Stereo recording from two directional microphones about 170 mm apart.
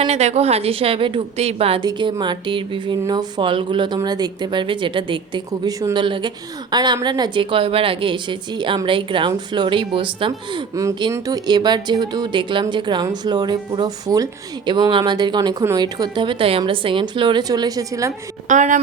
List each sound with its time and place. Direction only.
0.0 s a woman's voice: 40° right (ahead or behind)
10.8 s speech: 20° right (ahead or behind)
18.4 s speech: 45° right (ahead or behind)